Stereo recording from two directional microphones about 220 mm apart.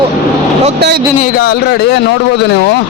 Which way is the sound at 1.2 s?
45° left (ahead or behind).